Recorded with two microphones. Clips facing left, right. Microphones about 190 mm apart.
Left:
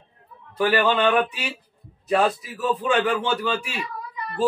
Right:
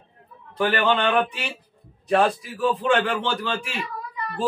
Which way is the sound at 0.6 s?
5° left (ahead or behind).